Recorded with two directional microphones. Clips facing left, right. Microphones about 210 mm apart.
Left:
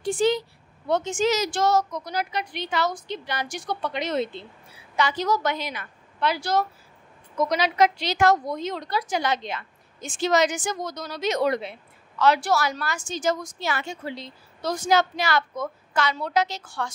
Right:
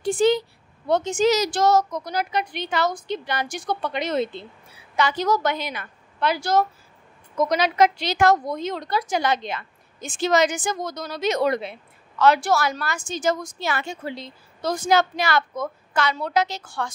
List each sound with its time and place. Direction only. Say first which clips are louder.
0.8 s a woman's voice: right 3 dB; 35° right (ahead or behind); by 16.9 s 55° right (ahead or behind)